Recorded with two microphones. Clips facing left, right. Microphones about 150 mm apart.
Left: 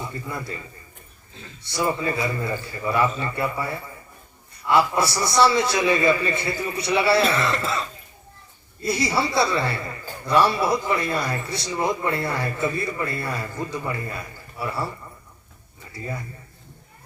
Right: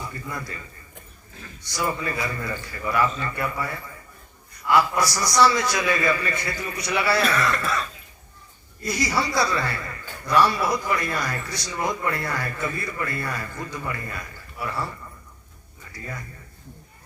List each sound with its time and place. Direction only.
0.0 s a man's voice: 25° left (ahead or behind)
15.9 s a man's voice: 25° left (ahead or behind)